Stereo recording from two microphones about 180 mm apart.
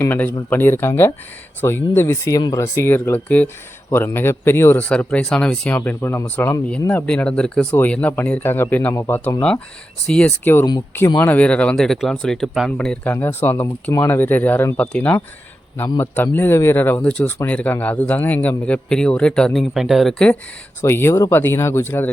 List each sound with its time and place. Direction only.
0.0 s speech: 10° left (ahead or behind)
11.3 s speech: 5° left (ahead or behind)
20.8 s speech: 15° left (ahead or behind)